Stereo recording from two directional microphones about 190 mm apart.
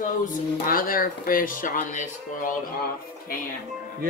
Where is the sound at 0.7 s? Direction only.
50° left (ahead or behind).